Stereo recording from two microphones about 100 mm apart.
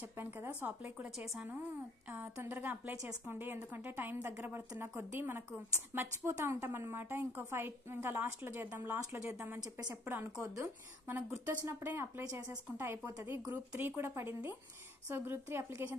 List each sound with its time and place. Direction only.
0.2 s a woman's voice: 20° right (ahead or behind)
2.4 s a woman's voice: 15° right (ahead or behind)